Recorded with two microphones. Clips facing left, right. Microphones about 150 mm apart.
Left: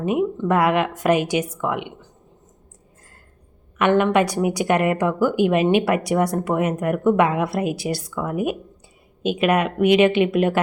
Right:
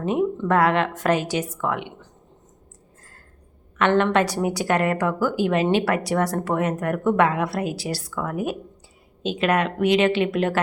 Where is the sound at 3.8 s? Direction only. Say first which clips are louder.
Left 2 dB; 10° left (ahead or behind).